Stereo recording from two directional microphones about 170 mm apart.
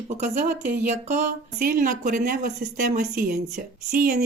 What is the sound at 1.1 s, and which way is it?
Speech, 55° right (ahead or behind).